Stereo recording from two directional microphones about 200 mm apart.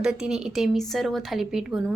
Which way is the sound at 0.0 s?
5° right (ahead or behind).